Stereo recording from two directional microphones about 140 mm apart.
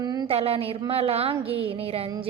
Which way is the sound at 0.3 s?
45° right (ahead or behind).